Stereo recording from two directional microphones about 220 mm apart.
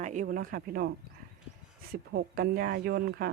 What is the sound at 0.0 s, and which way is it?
Speech, 35° right (ahead or behind).